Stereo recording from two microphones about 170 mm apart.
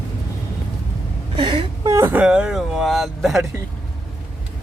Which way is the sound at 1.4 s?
30° right (ahead or behind).